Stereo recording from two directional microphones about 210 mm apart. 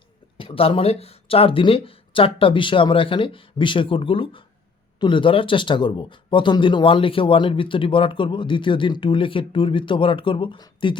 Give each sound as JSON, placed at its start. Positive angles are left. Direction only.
{"t": 0.3, "sound": "speech", "side_deg": 25}